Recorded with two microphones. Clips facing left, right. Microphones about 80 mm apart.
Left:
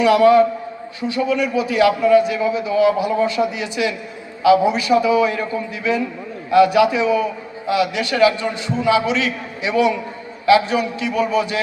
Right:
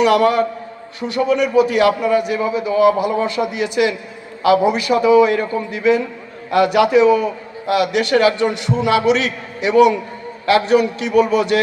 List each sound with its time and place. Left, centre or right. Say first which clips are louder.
0.0 s a man's voice: left 2 dB; right